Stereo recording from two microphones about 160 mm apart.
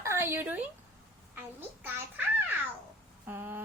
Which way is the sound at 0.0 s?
15° right (ahead or behind).